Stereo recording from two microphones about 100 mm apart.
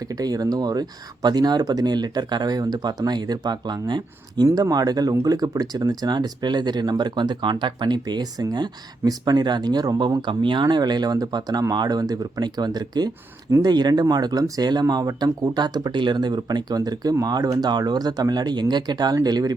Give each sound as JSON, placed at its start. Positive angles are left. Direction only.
{"t": 0.1, "sound": "speech", "side_deg": -40}